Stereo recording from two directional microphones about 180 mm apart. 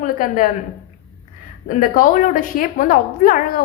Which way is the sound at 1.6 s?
50° left (ahead or behind).